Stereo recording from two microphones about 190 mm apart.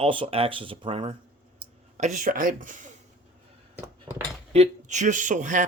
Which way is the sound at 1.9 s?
40° right (ahead or behind).